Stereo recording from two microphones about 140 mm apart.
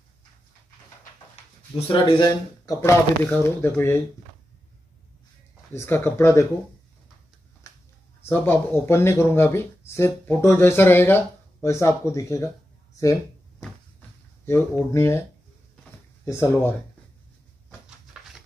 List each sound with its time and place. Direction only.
1.9 s speech: 35° left (ahead or behind)
2.8 s speech: 15° left (ahead or behind)
5.7 s speech: 15° left (ahead or behind)
8.3 s speech: 15° left (ahead or behind)
14.4 s speech: 20° left (ahead or behind)
16.3 s speech: 20° left (ahead or behind)